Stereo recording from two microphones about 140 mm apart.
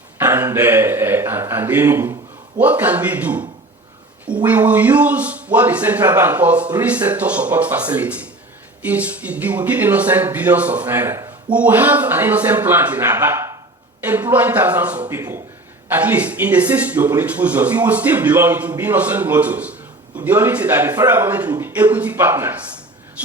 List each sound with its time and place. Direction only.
0.2 s a sound: 15° right (ahead or behind)
2.6 s a man's voice: 10° right (ahead or behind)
4.4 s a man's voice: 10° right (ahead or behind)